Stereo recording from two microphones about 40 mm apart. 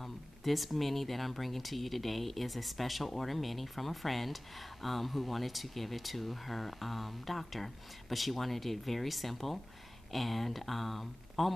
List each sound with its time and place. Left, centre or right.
0.0 s speech: centre